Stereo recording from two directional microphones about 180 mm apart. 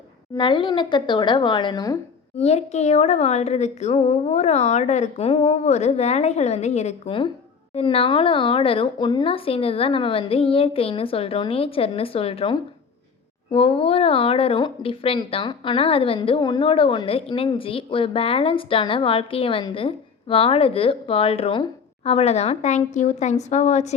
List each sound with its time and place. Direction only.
0.3 s speech: 25° left (ahead or behind)
2.3 s speech: 35° left (ahead or behind)